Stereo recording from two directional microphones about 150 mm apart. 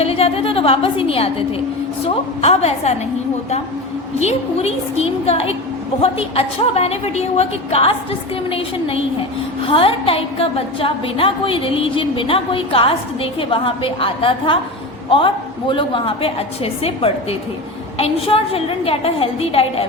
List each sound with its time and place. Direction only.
0.0 s a woman's voice: 40° left (ahead or behind)
4.2 s a woman's voice: 45° left (ahead or behind)
15.7 s a woman's voice: 35° left (ahead or behind)
17.9 s a woman's voice: 40° left (ahead or behind)